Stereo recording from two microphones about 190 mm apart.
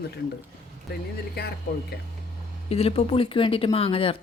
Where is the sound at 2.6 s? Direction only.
30° left (ahead or behind).